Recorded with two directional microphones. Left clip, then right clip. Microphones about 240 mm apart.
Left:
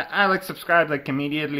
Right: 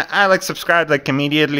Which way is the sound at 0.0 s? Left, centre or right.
Right.